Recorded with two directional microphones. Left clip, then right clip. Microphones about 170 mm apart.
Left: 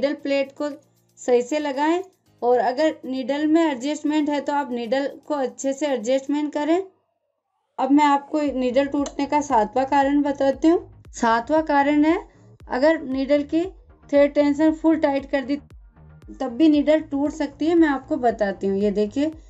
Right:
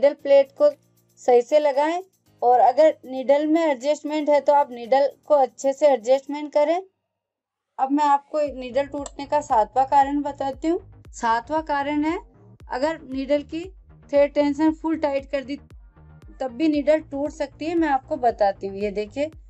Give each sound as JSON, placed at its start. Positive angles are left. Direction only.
{"t": 0.0, "sound": "speech", "side_deg": -40}
{"t": 7.7, "sound": "a woman's voice", "side_deg": -25}